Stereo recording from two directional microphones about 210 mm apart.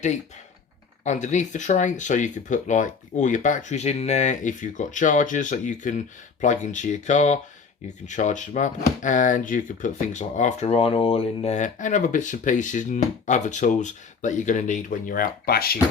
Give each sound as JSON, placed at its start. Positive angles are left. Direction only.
{"t": 1.0, "sound": "speech", "side_deg": 35}